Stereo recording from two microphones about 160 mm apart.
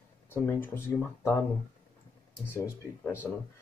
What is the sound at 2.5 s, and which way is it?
Speech, 15° left (ahead or behind).